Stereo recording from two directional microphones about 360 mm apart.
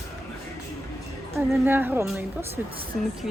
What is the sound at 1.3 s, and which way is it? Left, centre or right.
A woman's voice, centre.